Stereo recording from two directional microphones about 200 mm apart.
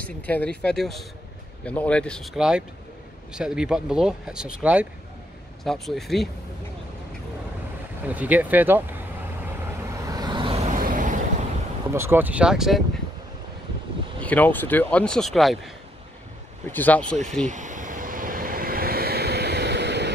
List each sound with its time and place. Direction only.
0.3 s speech: 5° left (ahead or behind)
8.1 s speech: 10° right (ahead or behind)
9.9 s vehicle: 20° right (ahead or behind)
10.8 s vehicle: 40° right (ahead or behind)
11.9 s speech: 10° right (ahead or behind)
14.2 s speech: 10° left (ahead or behind)
16.7 s speech: 10° left (ahead or behind)
17.5 s vehicle: 40° right (ahead or behind); by 20.1 s 60° right (ahead or behind)